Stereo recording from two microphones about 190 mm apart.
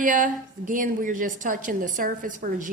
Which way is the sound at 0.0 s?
45° right (ahead or behind).